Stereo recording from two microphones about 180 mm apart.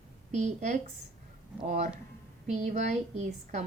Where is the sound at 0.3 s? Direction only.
40° right (ahead or behind).